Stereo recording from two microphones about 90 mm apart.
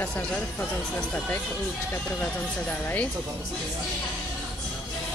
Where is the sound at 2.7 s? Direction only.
20° left (ahead or behind).